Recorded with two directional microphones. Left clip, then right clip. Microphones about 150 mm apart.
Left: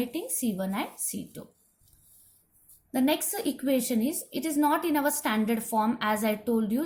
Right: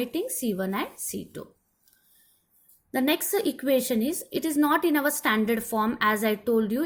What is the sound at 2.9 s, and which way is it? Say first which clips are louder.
A woman's voice: right 3 dB; 40° right (ahead or behind).